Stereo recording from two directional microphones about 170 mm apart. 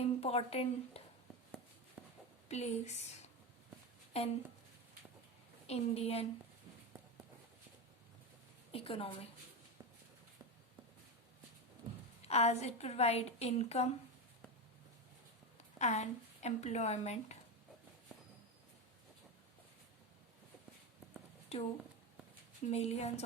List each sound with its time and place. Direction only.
0.0 s a woman's voice: 35° left (ahead or behind)
2.0 s a sound: 5° right (ahead or behind)
2.5 s a woman's voice: 40° left (ahead or behind)
4.1 s a woman's voice: 35° left (ahead or behind)
5.6 s a woman's voice: 40° left (ahead or behind)
8.7 s a woman's voice: 35° left (ahead or behind)
12.2 s a woman's voice: 40° left (ahead or behind)
15.8 s a woman's voice: 40° left (ahead or behind)
21.5 s a woman's voice: 40° left (ahead or behind)